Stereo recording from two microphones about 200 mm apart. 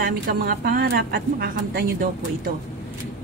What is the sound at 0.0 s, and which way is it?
A woman's voice, 50° right (ahead or behind).